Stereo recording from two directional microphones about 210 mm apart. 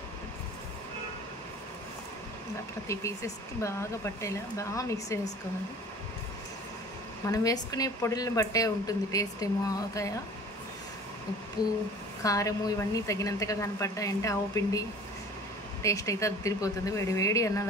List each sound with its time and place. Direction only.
2.9 s a woman's voice: 15° left (ahead or behind)
7.2 s a woman's voice: 15° left (ahead or behind)
11.6 s speech: 5° right (ahead or behind)
12.2 s a woman's voice: 15° left (ahead or behind)